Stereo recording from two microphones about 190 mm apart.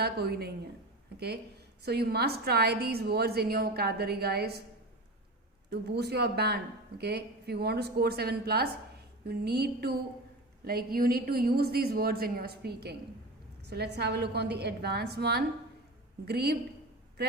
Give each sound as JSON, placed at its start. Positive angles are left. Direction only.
{"t": 0.0, "sound": "a woman's voice", "side_deg": -55}
{"t": 5.7, "sound": "a woman's voice", "side_deg": -60}